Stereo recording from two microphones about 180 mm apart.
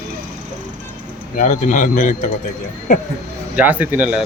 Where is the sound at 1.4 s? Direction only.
45° left (ahead or behind).